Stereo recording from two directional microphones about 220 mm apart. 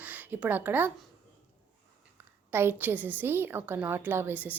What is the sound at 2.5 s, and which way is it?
A woman's voice, 10° right (ahead or behind).